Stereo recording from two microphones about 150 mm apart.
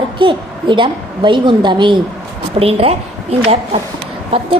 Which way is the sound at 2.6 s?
40° right (ahead or behind).